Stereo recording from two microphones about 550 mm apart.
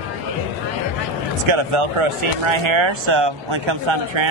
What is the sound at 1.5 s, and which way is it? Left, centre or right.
A man's voice, right.